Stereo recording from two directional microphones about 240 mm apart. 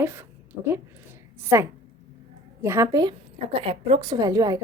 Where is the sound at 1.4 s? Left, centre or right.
Centre.